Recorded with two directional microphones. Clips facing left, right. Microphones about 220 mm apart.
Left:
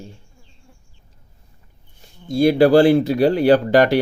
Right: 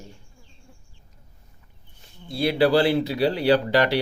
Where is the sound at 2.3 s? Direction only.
45° left (ahead or behind).